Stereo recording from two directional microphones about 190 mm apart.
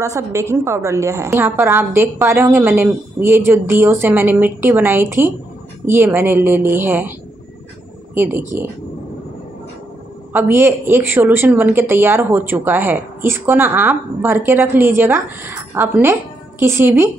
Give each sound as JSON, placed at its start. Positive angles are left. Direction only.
{"t": 0.0, "sound": "a woman's voice", "side_deg": -15}
{"t": 10.3, "sound": "a woman's voice", "side_deg": -10}